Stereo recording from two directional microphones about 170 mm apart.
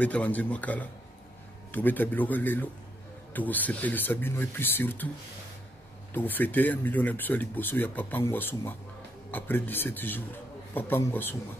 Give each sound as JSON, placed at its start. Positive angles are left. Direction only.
{"t": 0.0, "sound": "speech", "side_deg": 10}
{"t": 6.1, "sound": "speech", "side_deg": 10}